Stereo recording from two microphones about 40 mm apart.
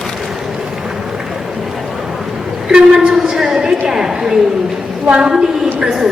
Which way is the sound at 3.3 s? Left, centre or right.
Centre.